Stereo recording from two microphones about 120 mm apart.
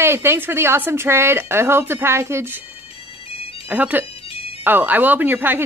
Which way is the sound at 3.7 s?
15° right (ahead or behind).